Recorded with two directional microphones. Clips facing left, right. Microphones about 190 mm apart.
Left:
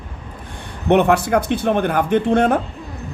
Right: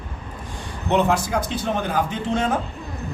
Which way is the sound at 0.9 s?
60° left (ahead or behind).